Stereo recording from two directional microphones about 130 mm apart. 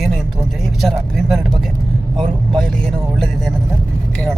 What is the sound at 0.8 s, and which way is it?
Speech, centre (ahead or behind).